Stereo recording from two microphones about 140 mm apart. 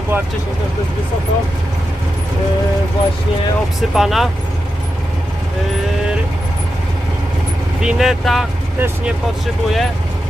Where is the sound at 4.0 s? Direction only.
Centre (ahead or behind).